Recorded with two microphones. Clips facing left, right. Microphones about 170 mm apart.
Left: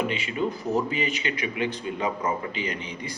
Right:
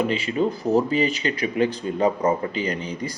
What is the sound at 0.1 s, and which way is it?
Speech, 35° right (ahead or behind).